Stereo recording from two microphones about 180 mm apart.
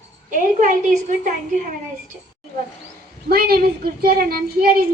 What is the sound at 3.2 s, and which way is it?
Child singing, 55° right (ahead or behind).